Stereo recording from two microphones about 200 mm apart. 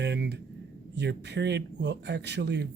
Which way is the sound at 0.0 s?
55° right (ahead or behind).